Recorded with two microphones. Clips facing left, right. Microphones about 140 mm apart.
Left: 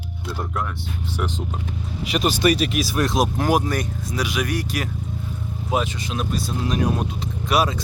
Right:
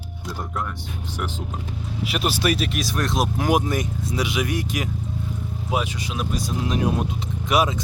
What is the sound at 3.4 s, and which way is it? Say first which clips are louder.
Speech: left 1 dB; 20° right (ahead or behind).